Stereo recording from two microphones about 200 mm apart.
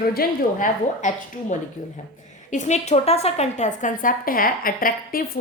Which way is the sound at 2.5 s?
35° left (ahead or behind).